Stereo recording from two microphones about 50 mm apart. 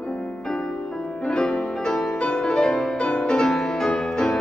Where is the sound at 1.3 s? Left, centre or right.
Centre.